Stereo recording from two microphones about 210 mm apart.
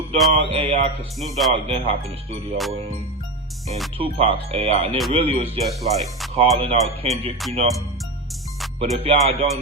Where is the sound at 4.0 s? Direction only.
25° right (ahead or behind).